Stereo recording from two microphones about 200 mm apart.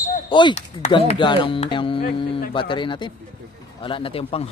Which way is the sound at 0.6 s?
35° left (ahead or behind).